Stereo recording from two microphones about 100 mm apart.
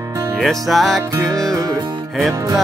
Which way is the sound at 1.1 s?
35° right (ahead or behind).